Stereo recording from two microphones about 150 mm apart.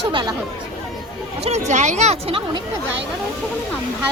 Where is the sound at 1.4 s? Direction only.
50° right (ahead or behind).